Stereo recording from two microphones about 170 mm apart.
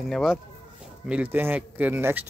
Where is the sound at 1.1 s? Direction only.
10° right (ahead or behind).